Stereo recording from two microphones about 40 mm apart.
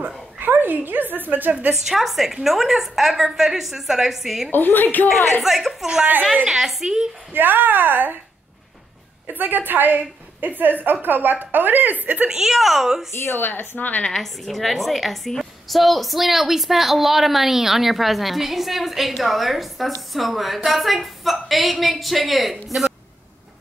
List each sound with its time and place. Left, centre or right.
0.4 s a woman's voice: right
2.0 s a woman's voice: centre
4.5 s a woman's voice: left
5.4 s a woman's voice: centre
7.3 s a woman's voice: right
9.3 s a woman's voice: right
12.4 s a woman's voice: centre
13.1 s speech: left
13.5 s a woman's voice: left
14.1 s a woman's voice: centre